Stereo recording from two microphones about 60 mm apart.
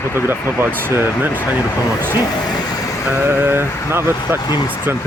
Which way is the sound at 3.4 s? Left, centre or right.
Right.